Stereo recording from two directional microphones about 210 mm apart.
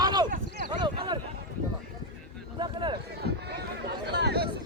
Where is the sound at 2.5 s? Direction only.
20° right (ahead or behind).